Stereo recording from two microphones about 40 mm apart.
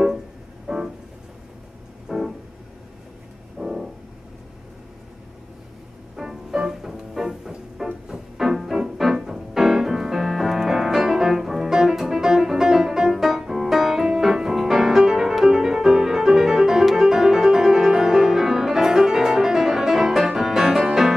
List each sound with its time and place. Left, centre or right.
0.7 s music: centre
2.0 s keyboard: centre
3.5 s music: centre
6.1 s music: centre